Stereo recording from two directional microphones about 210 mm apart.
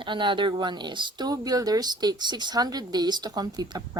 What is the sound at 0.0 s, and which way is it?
A woman's voice, 25° right (ahead or behind).